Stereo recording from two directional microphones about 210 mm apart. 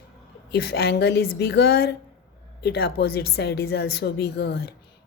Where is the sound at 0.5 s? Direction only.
50° left (ahead or behind).